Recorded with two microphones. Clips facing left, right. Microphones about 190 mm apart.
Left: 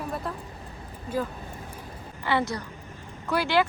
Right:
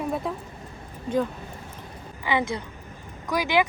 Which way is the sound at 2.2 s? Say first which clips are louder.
Right 1 dB; 15° right (ahead or behind).